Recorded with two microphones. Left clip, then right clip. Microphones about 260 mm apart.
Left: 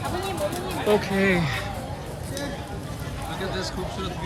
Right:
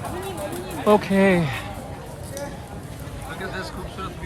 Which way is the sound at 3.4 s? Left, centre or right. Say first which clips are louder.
Left 2 dB; centre.